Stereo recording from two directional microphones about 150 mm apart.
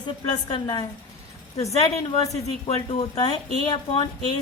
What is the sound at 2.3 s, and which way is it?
Speech, 40° left (ahead or behind).